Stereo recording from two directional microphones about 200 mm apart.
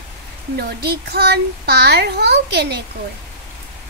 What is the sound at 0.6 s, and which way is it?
A child's voice, 50° right (ahead or behind).